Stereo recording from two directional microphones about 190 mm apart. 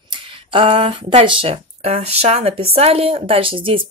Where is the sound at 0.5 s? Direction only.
30° right (ahead or behind).